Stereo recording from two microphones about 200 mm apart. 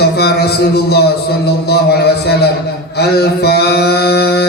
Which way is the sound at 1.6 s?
55° left (ahead or behind).